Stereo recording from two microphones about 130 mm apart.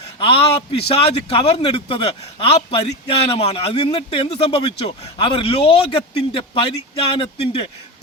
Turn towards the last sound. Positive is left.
turn(degrees=50)  # may be behind; listen again after turning